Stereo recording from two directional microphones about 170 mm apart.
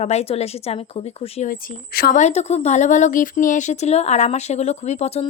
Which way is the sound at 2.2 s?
40° left (ahead or behind).